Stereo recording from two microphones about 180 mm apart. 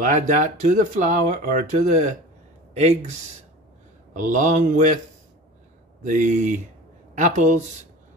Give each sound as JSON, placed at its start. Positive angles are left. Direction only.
{"t": 0.0, "sound": "speech", "side_deg": -45}
{"t": 6.0, "sound": "speech", "side_deg": -45}